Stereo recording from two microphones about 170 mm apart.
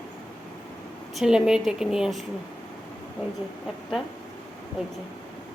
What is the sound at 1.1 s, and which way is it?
Speech, 5° right (ahead or behind).